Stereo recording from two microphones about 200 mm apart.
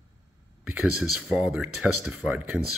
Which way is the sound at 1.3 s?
5° right (ahead or behind).